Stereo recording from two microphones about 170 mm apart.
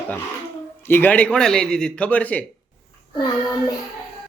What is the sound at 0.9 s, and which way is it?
Speech, 10° left (ahead or behind).